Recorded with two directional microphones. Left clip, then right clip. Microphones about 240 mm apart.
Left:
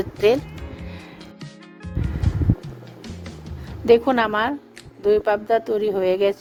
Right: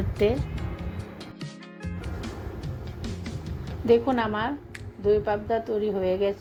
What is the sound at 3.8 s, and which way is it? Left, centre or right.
A woman's voice, left.